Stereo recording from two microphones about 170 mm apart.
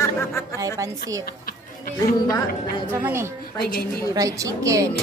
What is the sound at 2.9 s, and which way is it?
A woman's voice, 15° right (ahead or behind).